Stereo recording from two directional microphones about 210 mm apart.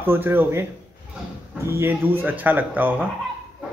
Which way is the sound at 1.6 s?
10° right (ahead or behind).